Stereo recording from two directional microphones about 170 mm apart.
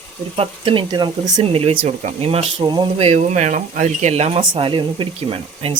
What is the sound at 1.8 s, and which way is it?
Speech, 45° right (ahead or behind).